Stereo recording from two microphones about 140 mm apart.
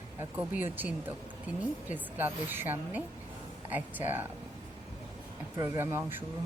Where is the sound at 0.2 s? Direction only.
10° right (ahead or behind).